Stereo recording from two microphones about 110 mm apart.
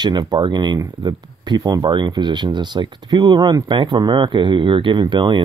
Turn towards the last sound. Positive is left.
turn(degrees=-45)  # may be behind; listen again after turning